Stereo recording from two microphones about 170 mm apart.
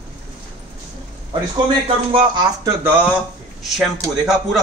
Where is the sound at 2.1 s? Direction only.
30° right (ahead or behind).